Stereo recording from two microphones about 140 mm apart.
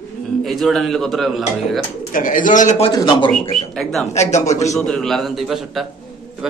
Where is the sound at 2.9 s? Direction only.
30° left (ahead or behind).